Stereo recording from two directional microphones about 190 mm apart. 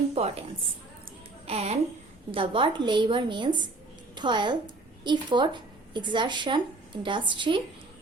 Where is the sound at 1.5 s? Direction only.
35° right (ahead or behind).